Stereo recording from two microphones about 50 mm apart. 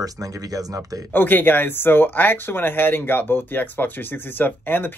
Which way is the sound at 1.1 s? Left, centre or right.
Left.